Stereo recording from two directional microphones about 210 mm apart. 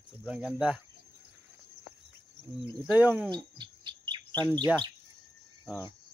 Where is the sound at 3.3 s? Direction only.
20° right (ahead or behind).